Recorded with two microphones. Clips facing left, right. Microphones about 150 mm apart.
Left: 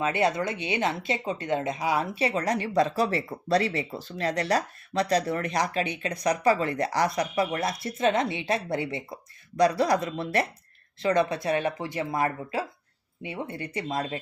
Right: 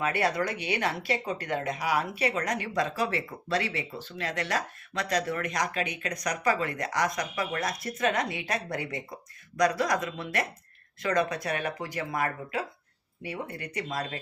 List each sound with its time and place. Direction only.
0.0 s a woman's voice: 25° left (ahead or behind)